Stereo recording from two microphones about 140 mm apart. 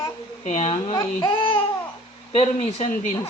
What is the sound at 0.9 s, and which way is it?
Speech, 35° left (ahead or behind).